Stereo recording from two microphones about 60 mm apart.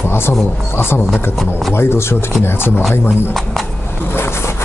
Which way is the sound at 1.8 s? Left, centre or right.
Left.